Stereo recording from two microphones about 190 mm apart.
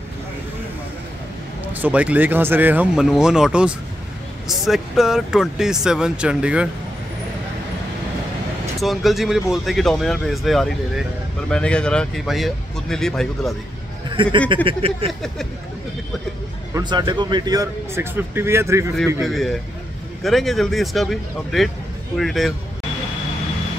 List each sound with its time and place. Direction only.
1.7 s a man's voice: 10° right (ahead or behind)
8.7 s speech: centre (ahead or behind)
14.1 s speech: 25° right (ahead or behind)
14.5 s a sound: 25° right (ahead or behind)
16.7 s a man's voice: 25° right (ahead or behind)
19.2 s speech: centre (ahead or behind)